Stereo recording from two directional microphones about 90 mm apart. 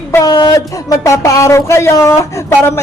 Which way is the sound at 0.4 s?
40° left (ahead or behind).